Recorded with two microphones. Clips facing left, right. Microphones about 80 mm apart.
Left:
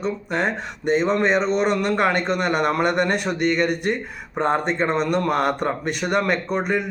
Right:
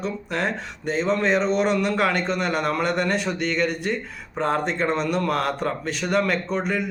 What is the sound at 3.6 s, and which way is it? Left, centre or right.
Speech, left.